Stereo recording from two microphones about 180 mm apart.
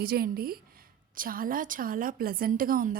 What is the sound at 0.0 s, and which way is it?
A woman's voice, 55° right (ahead or behind).